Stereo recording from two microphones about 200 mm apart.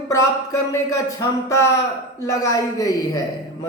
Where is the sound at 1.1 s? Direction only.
15° left (ahead or behind).